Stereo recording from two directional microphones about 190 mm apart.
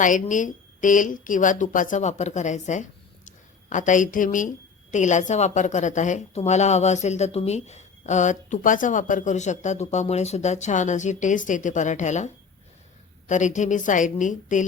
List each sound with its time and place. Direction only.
0.0 s speech: 45° left (ahead or behind)